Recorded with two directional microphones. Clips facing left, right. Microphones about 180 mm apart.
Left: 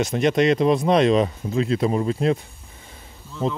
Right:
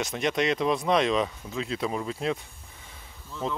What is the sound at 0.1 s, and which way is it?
Speech, 40° left (ahead or behind).